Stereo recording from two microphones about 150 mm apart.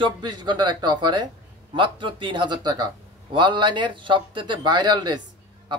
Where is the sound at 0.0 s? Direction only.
30° right (ahead or behind).